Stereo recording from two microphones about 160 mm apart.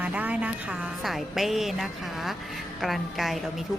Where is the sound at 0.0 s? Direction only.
10° right (ahead or behind).